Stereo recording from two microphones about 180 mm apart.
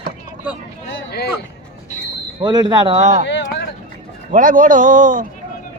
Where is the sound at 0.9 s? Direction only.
65° left (ahead or behind).